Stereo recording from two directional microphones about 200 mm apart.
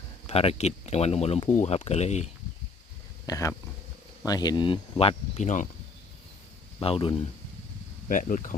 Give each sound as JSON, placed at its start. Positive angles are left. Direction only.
{"t": 0.3, "sound": "speech", "side_deg": 30}
{"t": 3.2, "sound": "speech", "side_deg": 15}
{"t": 6.7, "sound": "speech", "side_deg": 25}
{"t": 8.0, "sound": "speech", "side_deg": 40}